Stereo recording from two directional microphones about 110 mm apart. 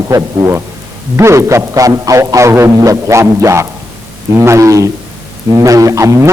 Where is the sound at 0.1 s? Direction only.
25° right (ahead or behind).